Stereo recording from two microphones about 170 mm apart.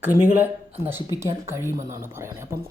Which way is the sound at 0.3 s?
10° right (ahead or behind).